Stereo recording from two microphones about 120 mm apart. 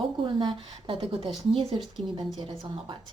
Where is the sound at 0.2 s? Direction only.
45° right (ahead or behind).